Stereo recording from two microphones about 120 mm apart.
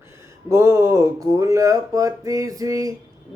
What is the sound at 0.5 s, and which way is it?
Speech, 20° right (ahead or behind).